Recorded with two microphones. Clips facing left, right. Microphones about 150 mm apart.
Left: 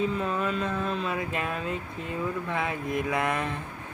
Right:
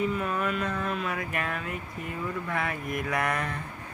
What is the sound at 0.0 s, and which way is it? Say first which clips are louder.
Speech: left 1 dB; 25° left (ahead or behind).